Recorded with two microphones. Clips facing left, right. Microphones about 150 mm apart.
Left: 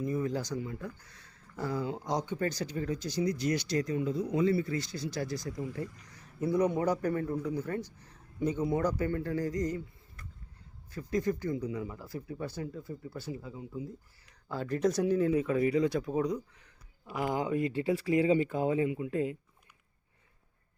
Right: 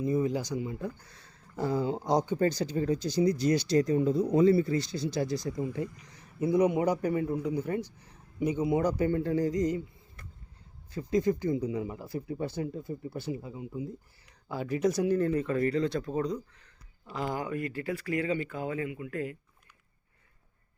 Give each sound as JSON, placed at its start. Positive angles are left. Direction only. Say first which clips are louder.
{"t": 0.0, "sound": "a man's voice", "louder": "right 4 dB", "side_deg": -20}
{"t": 10.9, "sound": "speech", "louder": "right 4 dB", "side_deg": -20}